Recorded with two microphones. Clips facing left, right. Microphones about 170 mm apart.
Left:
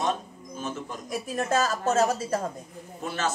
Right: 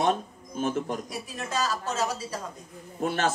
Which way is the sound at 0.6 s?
55° right (ahead or behind).